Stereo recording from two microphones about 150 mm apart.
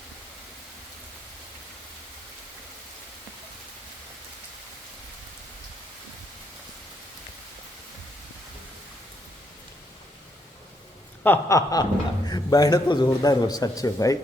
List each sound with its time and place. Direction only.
11.2 s a man's voice: 15° left (ahead or behind)